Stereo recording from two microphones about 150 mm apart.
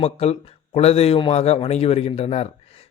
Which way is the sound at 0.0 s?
45° left (ahead or behind).